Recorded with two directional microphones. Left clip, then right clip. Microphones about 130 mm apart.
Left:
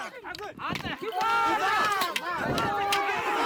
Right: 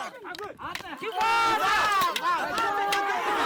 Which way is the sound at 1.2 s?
35° right (ahead or behind).